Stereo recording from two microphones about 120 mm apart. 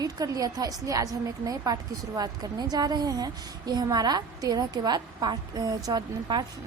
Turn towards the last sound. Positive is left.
turn(degrees=-35)  # may be behind; listen again after turning